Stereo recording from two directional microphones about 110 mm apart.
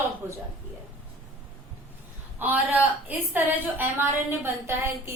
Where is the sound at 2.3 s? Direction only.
15° right (ahead or behind).